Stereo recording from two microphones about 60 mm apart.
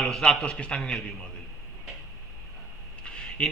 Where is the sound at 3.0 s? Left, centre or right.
Centre.